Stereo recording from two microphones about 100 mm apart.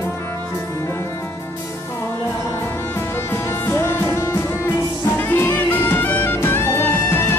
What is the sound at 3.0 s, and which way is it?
Music, 25° left (ahead or behind).